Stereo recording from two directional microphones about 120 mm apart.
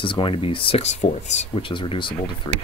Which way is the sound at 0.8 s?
75° left (ahead or behind).